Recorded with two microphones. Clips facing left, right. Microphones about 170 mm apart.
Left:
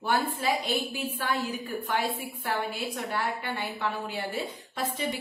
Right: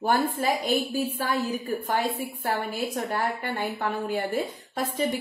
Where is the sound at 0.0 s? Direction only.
45° right (ahead or behind).